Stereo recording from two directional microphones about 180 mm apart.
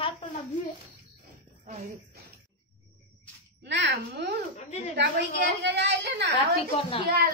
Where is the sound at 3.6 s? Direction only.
75° right (ahead or behind).